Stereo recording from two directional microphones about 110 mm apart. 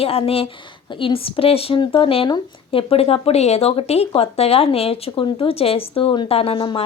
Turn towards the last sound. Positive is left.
turn(degrees=50)  # may be behind; listen again after turning